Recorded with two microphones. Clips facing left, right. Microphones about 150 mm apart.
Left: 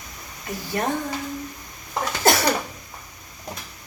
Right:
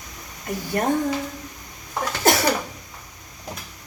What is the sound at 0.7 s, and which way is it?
Speech, 55° right (ahead or behind).